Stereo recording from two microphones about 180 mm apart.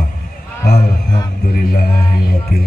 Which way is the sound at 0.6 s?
20° left (ahead or behind).